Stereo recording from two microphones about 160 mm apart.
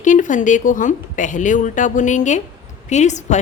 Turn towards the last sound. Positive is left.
turn(degrees=50)  # may be behind; listen again after turning